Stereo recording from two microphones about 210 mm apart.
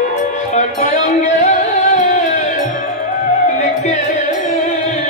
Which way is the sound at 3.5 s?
35° left (ahead or behind).